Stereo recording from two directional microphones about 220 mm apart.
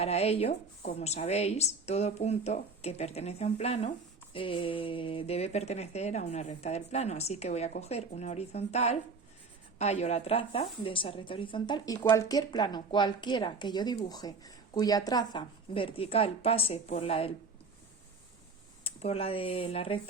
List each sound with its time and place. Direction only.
0.0 s speech: 30° left (ahead or behind)
18.8 s speech: 25° left (ahead or behind)